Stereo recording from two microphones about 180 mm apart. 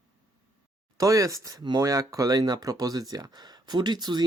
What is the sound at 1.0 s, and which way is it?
Speech, 20° right (ahead or behind).